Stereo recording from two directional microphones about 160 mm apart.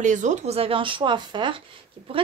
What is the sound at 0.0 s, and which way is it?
Speech, 50° right (ahead or behind).